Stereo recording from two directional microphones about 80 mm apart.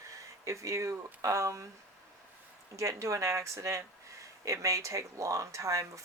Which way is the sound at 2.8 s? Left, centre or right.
Right.